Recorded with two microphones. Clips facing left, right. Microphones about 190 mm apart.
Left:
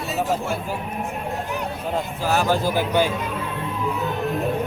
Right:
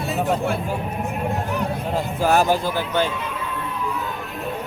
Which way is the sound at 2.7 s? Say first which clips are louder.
Left 2 dB; 10° left (ahead or behind).